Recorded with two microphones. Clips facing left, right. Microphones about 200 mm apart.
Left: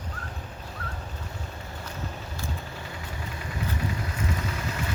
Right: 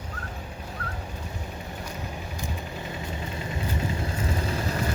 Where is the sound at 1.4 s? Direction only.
15° right (ahead or behind).